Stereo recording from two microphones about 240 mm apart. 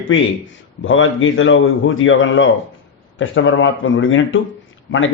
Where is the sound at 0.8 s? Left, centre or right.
Left.